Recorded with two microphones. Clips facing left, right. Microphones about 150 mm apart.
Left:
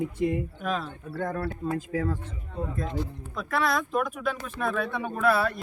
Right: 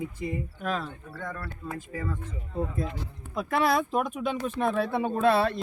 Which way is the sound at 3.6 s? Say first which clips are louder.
Right 1 dB; 30° right (ahead or behind).